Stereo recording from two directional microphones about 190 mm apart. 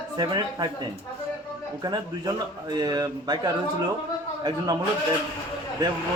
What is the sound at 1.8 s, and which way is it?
A man's voice, 20° right (ahead or behind).